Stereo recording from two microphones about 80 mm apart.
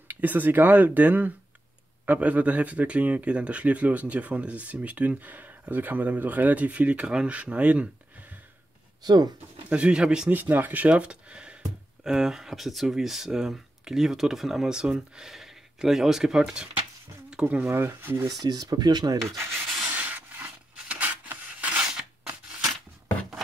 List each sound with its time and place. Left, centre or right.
0.1 s speech: right
9.0 s speech: right
9.7 s speech: centre
10.3 s speech: right; by 16.6 s centre
17.3 s a sound: centre
17.6 s speech: right
18.4 s speech: right
20.0 s rub: right